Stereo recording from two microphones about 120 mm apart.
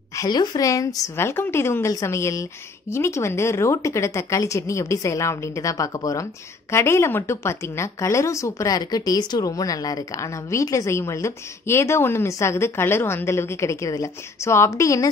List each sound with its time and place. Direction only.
0.1 s a woman's voice: 30° left (ahead or behind)